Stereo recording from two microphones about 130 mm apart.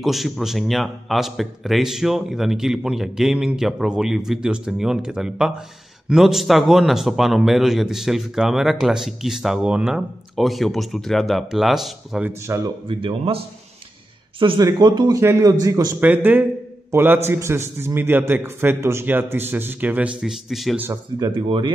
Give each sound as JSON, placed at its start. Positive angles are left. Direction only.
{"t": 0.0, "sound": "a man's voice", "side_deg": 0}
{"t": 12.3, "sound": "a man's voice", "side_deg": -20}
{"t": 12.8, "sound": "a man's voice", "side_deg": -45}
{"t": 14.4, "sound": "a man's voice", "side_deg": -35}
{"t": 16.0, "sound": "a man's voice", "side_deg": -15}
{"t": 20.7, "sound": "a man's voice", "side_deg": -15}
{"t": 21.2, "sound": "speech", "side_deg": -35}